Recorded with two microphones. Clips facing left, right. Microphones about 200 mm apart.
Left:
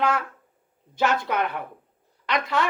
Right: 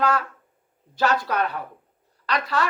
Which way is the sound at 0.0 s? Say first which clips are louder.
Right 1 dB; 25° left (ahead or behind).